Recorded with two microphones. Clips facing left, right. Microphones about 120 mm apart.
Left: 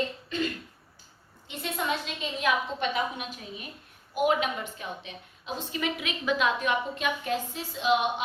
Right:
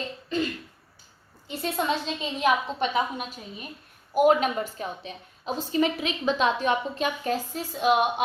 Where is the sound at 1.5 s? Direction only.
35° right (ahead or behind).